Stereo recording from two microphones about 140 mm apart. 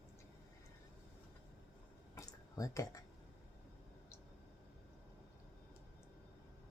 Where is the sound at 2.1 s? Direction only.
25° left (ahead or behind).